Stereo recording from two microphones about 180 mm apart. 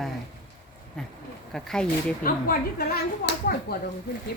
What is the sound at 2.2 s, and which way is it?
Speech, 55° left (ahead or behind).